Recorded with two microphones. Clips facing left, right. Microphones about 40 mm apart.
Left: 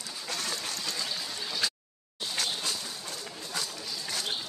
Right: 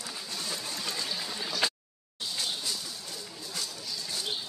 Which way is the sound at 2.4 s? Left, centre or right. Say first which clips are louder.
Left 2 dB; left.